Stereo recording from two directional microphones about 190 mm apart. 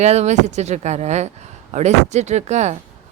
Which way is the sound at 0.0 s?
35° right (ahead or behind).